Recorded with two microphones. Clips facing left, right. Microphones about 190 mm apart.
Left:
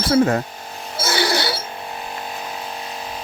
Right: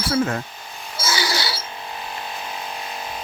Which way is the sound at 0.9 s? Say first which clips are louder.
Left 4 dB; 60° left (ahead or behind).